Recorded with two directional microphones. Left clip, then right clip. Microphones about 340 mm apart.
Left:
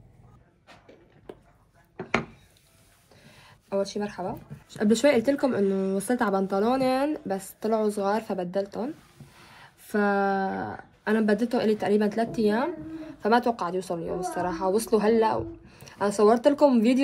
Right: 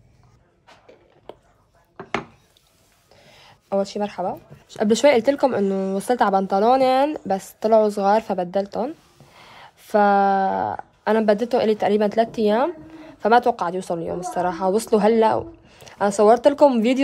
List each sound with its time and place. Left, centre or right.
4.0 s speech: right